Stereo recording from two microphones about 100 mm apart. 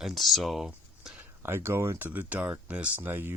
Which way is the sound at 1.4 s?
25° right (ahead or behind).